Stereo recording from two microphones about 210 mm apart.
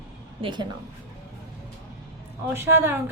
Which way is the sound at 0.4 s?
20° right (ahead or behind).